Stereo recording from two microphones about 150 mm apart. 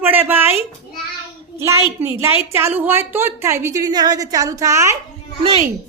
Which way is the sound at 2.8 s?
15° right (ahead or behind).